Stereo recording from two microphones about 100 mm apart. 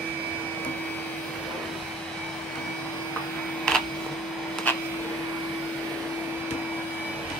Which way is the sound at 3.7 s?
10° left (ahead or behind).